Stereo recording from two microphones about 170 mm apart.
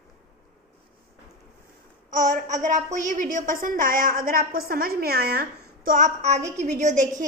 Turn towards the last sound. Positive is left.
turn(degrees=-45)  # may be behind; listen again after turning